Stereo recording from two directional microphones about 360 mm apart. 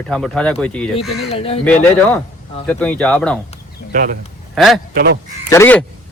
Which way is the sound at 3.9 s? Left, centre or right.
Right.